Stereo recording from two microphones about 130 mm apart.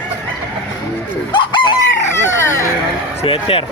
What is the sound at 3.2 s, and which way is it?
Speech, 45° left (ahead or behind).